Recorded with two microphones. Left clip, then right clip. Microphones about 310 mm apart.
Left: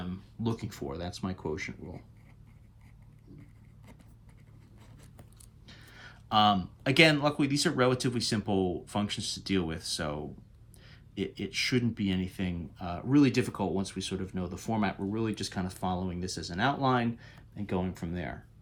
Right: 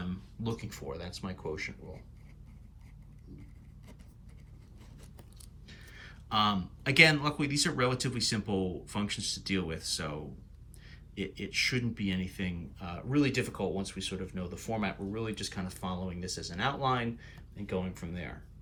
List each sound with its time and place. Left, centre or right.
0.4 s speech: centre
5.6 s speech: centre